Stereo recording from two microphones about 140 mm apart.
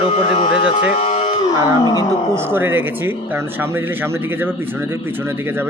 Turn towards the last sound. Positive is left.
turn(degrees=-15)  # may be behind; listen again after turning